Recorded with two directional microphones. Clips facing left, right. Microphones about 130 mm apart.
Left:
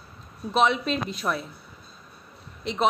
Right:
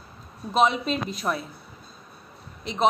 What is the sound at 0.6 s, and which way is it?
Speech, 40° right (ahead or behind).